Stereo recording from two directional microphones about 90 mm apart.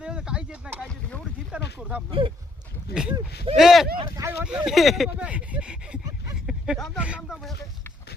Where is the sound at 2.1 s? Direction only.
75° right (ahead or behind).